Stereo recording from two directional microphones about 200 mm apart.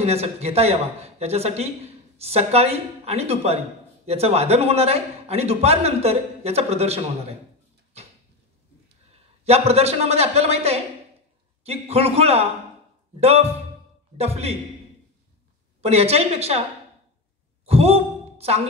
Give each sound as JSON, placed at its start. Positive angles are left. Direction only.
{"t": 0.0, "sound": "a man's voice", "side_deg": -30}
{"t": 9.4, "sound": "a man's voice", "side_deg": -30}
{"t": 15.8, "sound": "a man's voice", "side_deg": -30}
{"t": 17.6, "sound": "a sound", "side_deg": -30}